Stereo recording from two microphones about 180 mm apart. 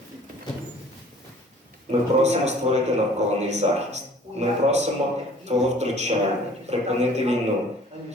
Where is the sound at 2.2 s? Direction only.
40° right (ahead or behind).